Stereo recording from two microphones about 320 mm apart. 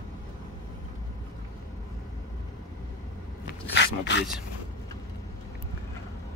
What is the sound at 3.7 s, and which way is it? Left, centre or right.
Speech, left.